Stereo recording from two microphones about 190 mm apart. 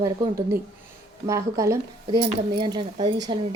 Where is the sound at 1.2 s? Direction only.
15° right (ahead or behind).